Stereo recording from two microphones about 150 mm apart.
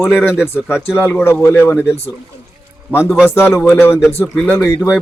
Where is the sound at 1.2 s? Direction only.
20° left (ahead or behind).